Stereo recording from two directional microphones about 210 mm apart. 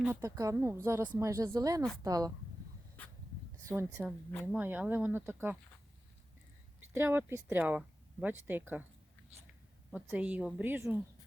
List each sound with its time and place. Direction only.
0.0 s speech: 10° right (ahead or behind)
3.7 s speech: 10° right (ahead or behind)
6.9 s speech: 10° right (ahead or behind)
9.9 s speech: 5° right (ahead or behind)